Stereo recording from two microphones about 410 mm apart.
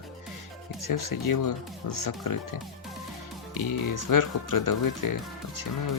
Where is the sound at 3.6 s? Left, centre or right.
Left.